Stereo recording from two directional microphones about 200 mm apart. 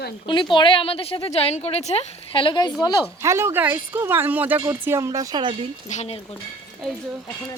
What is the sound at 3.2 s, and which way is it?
Speech, 15° right (ahead or behind).